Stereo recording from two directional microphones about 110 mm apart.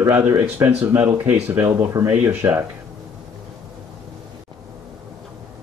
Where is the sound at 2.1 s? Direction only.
20° right (ahead or behind).